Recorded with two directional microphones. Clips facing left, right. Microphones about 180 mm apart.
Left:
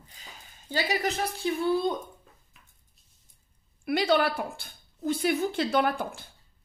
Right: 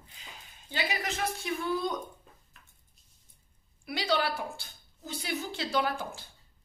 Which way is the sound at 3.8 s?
55° left (ahead or behind).